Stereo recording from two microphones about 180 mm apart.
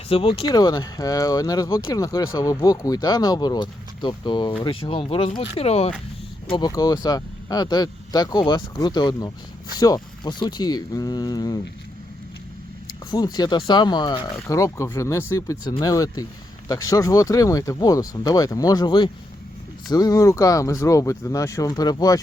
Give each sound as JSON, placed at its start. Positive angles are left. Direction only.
{"t": 0.1, "sound": "speech", "side_deg": 30}
{"t": 6.5, "sound": "speech", "side_deg": 20}
{"t": 13.1, "sound": "speech", "side_deg": 20}